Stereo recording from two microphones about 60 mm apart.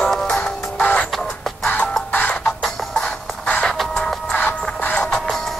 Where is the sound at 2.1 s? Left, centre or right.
Left.